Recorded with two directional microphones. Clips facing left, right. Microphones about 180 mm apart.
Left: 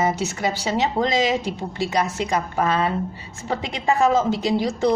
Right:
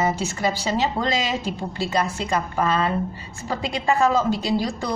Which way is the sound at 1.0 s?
20° left (ahead or behind).